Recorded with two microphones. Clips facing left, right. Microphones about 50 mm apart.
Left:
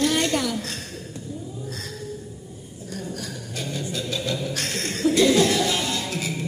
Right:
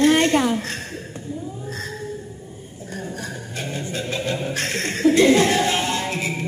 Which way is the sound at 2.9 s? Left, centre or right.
Right.